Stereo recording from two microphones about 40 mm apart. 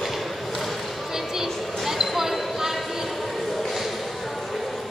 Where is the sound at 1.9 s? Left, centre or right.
Centre.